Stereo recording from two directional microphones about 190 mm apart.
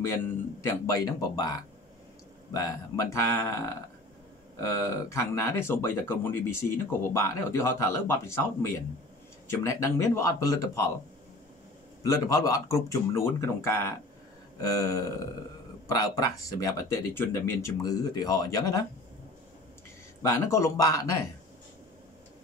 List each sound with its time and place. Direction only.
0.0 s speech: 15° left (ahead or behind)
12.0 s speech: 15° left (ahead or behind)
20.2 s speech: 15° left (ahead or behind)